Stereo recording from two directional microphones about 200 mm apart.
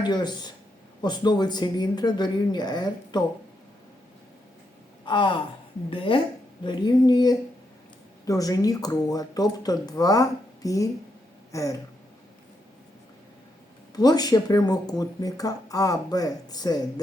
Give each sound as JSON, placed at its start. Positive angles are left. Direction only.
{"t": 0.0, "sound": "speech", "side_deg": 20}
{"t": 5.0, "sound": "speech", "side_deg": 25}
{"t": 13.9, "sound": "speech", "side_deg": 20}